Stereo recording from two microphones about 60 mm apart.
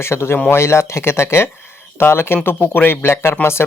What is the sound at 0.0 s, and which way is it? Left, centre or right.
Speech, left.